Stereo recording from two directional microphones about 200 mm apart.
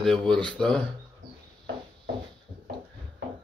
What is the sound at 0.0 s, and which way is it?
Speech, centre (ahead or behind).